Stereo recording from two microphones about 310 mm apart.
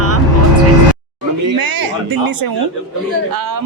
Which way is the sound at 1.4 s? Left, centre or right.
Right.